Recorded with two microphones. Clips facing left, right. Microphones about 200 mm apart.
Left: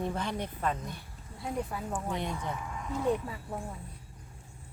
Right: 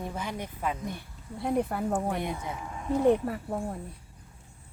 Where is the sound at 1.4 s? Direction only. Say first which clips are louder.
Right 7 dB; 60° right (ahead or behind).